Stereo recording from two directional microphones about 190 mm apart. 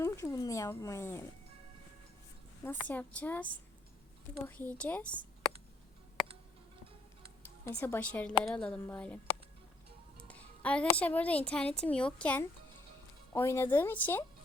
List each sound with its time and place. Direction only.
0.0 s a woman's voice: 15° left (ahead or behind)
2.6 s a woman's voice: 10° left (ahead or behind)
7.6 s a woman's voice: 10° left (ahead or behind)
10.2 s a woman's voice: 5° left (ahead or behind)